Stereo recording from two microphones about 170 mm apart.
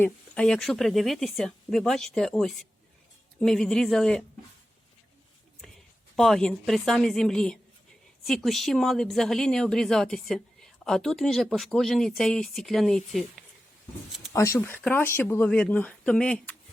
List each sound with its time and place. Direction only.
0.0 s speech: 5° left (ahead or behind)
6.1 s speech: centre (ahead or behind)
14.3 s speech: 15° left (ahead or behind)